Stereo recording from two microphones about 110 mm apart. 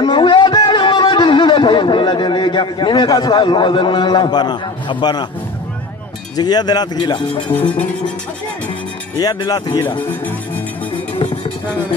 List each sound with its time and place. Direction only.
0.0 s a sound: 50° left (ahead or behind)
6.3 s speech: 40° left (ahead or behind)
7.4 s music: 15° left (ahead or behind)
9.2 s speech: 35° left (ahead or behind)
9.8 s music: 20° left (ahead or behind)